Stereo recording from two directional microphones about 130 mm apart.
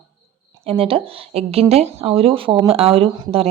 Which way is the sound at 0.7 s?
45° right (ahead or behind).